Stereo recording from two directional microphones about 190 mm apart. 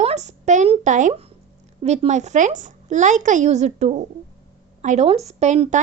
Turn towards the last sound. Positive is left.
turn(degrees=-35)  # may be behind; listen again after turning